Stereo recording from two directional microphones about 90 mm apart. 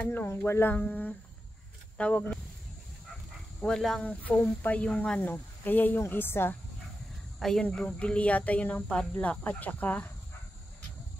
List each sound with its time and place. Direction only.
0.0 s speech: 25° left (ahead or behind)
3.6 s speech: 5° left (ahead or behind)
4.0 s speech: 15° left (ahead or behind)
5.2 s speech: 20° left (ahead or behind)
7.3 s speech: 5° left (ahead or behind)